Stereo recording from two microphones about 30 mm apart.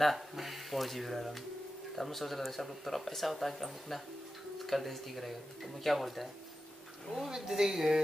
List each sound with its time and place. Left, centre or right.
0.0 s speech: centre
7.2 s speech: centre